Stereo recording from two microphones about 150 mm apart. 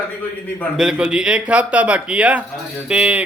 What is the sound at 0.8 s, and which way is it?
A man's voice, 5° right (ahead or behind).